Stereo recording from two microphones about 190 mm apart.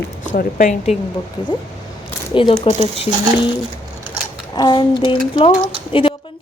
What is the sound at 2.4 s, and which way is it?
Speech, 30° left (ahead or behind).